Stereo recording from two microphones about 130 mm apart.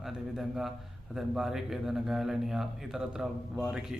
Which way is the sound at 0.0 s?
5° right (ahead or behind).